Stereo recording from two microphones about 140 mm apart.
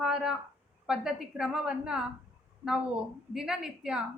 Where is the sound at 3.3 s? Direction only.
5° right (ahead or behind).